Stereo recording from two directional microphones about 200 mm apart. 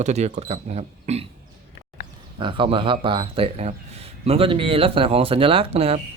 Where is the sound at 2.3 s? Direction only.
25° right (ahead or behind).